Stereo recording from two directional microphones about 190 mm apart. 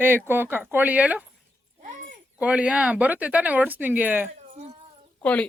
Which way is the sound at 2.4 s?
5° right (ahead or behind).